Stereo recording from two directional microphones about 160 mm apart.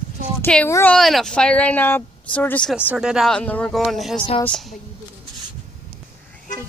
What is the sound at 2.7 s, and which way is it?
Speech, 5° right (ahead or behind).